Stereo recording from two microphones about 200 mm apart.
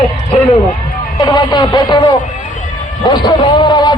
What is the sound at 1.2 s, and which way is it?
A man's voice, 20° left (ahead or behind).